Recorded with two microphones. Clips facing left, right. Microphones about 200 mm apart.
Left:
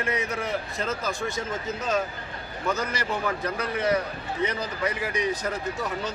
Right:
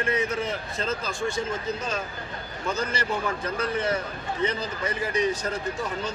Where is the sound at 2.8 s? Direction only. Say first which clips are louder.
Right 1 dB; 15° left (ahead or behind).